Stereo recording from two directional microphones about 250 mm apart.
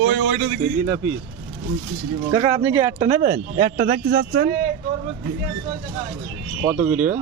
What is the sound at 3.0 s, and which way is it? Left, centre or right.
Speech, right.